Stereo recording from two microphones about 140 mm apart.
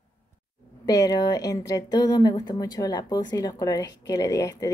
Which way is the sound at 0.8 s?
25° left (ahead or behind).